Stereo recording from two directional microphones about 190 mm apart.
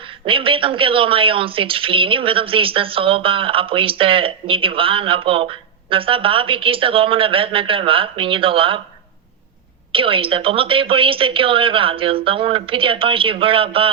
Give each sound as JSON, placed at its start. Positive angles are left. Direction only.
{"t": 0.3, "sound": "speech", "side_deg": -30}
{"t": 9.9, "sound": "speech", "side_deg": -30}